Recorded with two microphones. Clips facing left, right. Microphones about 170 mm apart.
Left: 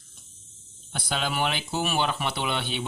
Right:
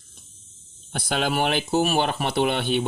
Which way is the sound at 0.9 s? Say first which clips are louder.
Right 5 dB; 50° right (ahead or behind).